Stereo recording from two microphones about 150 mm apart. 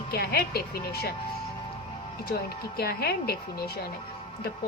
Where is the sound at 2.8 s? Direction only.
90° left.